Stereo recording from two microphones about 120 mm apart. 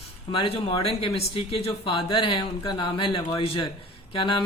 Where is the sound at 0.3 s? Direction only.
45° left (ahead or behind).